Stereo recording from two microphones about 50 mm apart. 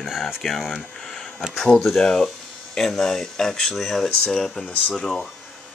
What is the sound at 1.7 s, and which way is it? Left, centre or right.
Speech, centre.